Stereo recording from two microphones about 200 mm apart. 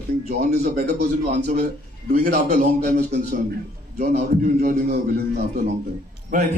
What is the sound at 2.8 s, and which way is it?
A man's voice, 50° right (ahead or behind).